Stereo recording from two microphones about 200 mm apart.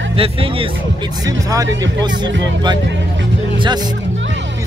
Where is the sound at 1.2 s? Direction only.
15° right (ahead or behind).